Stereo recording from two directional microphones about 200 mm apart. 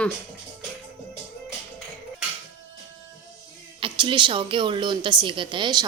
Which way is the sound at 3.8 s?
25° right (ahead or behind).